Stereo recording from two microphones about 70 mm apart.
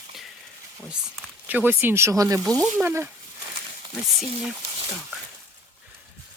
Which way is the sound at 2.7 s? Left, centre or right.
Right.